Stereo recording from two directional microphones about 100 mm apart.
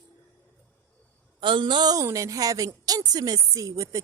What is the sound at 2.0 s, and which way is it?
A woman's voice, 30° right (ahead or behind).